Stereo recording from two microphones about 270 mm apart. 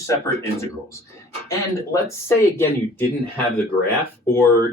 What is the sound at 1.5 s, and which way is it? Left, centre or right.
Speech, centre.